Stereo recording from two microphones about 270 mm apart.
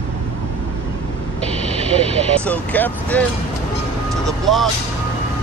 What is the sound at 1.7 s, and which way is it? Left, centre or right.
Speech, right.